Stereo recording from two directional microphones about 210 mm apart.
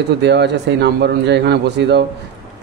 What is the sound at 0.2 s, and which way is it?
Speech, 55° right (ahead or behind).